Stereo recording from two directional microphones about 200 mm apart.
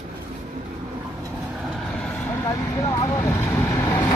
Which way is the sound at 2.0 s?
5° left (ahead or behind).